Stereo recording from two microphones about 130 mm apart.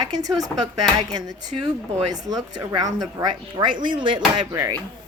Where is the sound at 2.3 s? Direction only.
30° right (ahead or behind).